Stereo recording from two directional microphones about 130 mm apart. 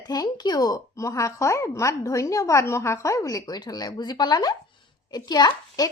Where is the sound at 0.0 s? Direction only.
30° left (ahead or behind).